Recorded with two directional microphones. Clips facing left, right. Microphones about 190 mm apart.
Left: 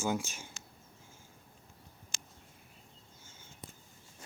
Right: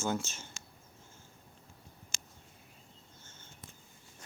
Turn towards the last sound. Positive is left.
turn(degrees=10)  # may be behind; listen again after turning